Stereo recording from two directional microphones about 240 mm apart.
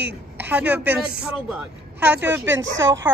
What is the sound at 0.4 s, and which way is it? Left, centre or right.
Speech, centre.